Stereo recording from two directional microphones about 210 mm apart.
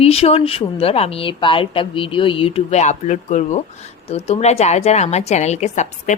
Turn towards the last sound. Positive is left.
turn(degrees=35)  # may be behind; listen again after turning